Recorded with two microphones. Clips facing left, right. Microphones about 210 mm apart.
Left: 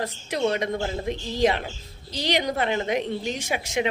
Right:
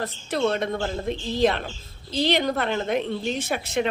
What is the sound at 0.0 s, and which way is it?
Speech, 15° left (ahead or behind).